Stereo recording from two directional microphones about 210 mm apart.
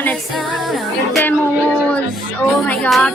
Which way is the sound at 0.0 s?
5° left (ahead or behind).